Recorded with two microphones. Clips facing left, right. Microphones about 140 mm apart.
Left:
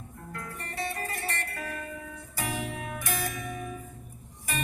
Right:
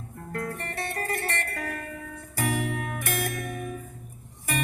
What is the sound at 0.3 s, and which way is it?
Music, 65° right (ahead or behind).